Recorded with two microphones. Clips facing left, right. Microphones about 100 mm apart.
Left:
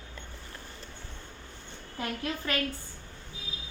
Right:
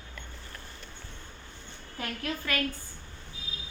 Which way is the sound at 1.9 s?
25° left (ahead or behind).